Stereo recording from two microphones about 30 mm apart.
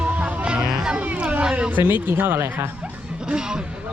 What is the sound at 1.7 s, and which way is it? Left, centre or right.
Speech, right.